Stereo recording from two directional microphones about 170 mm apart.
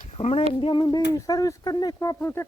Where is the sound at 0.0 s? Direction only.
40° left (ahead or behind).